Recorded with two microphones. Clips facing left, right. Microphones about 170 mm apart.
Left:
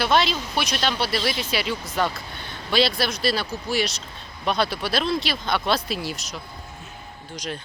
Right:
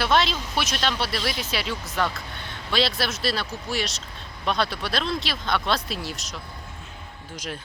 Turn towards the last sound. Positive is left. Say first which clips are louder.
# left 2 dB
turn(degrees=-5)  # may be behind; listen again after turning